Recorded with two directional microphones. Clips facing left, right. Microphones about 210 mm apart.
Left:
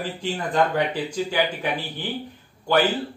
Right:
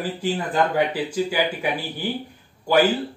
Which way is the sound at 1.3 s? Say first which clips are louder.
Right 1 dB; 10° right (ahead or behind).